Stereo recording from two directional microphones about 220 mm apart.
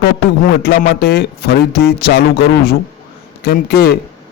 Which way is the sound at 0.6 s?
45° left (ahead or behind).